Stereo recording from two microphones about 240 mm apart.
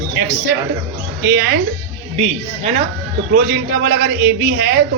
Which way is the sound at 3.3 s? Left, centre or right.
Right.